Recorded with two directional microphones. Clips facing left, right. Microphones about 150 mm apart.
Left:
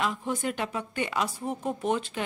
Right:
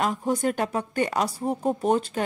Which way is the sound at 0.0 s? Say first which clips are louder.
Right 5 dB; 40° right (ahead or behind).